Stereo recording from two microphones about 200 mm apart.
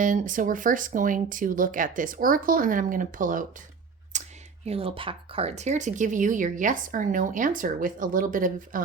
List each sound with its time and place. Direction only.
0.0 s speech: 40° right (ahead or behind)
4.1 s a sound: 35° right (ahead or behind)
4.6 s speech: 30° right (ahead or behind)